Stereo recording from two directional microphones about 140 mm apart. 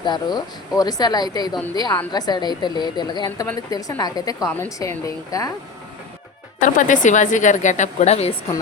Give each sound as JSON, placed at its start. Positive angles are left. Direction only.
{"t": 0.0, "sound": "a woman's voice", "side_deg": 30}
{"t": 6.6, "sound": "a woman's voice", "side_deg": 65}